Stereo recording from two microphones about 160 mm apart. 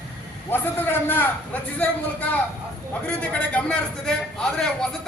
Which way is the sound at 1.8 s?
10° left (ahead or behind).